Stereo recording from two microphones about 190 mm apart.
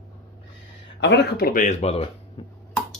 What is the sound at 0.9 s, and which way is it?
A man's voice, 65° left (ahead or behind).